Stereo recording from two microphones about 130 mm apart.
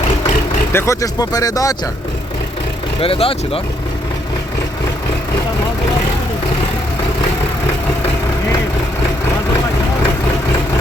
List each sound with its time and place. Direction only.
0.7 s speech: 20° left (ahead or behind)
3.0 s speech: 45° left (ahead or behind)